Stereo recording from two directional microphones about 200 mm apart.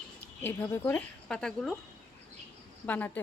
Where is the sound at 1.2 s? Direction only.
5° left (ahead or behind).